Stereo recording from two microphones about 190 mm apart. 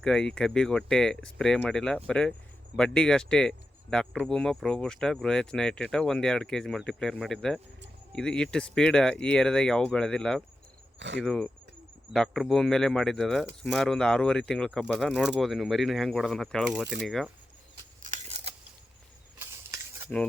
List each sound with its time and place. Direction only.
0.0 s speech: 5° left (ahead or behind)
18.0 s a sound: 35° right (ahead or behind)
20.1 s speech: 5° left (ahead or behind)